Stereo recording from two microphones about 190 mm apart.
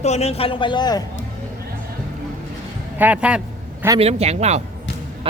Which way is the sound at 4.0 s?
35° right (ahead or behind).